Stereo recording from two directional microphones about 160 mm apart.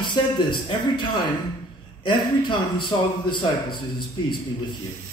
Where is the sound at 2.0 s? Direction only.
30° left (ahead or behind).